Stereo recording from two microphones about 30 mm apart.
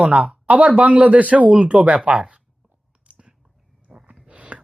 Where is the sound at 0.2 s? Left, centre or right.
Right.